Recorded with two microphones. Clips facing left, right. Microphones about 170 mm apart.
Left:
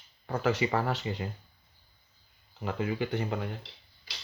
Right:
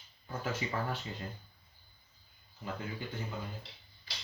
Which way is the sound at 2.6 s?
80° left.